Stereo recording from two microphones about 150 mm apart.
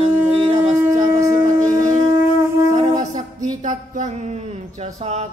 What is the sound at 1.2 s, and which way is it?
Shofar, 20° right (ahead or behind).